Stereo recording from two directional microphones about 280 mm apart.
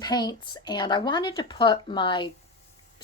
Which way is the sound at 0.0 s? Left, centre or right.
Centre.